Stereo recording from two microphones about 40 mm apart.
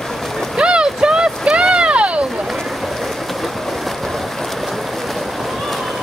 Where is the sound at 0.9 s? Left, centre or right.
Right.